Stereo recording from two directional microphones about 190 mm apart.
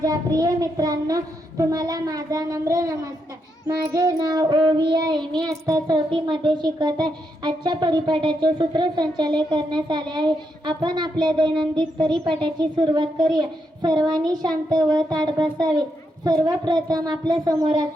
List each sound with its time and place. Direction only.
0.0 s a child's voice: 20° right (ahead or behind)